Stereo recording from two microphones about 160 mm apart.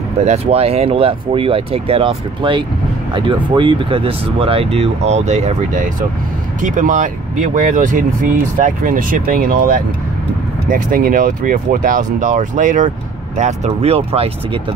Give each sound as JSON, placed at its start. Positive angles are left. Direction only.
{"t": 0.2, "sound": "speech", "side_deg": -40}